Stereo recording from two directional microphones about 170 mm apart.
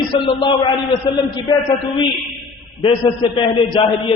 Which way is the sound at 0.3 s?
30° left (ahead or behind).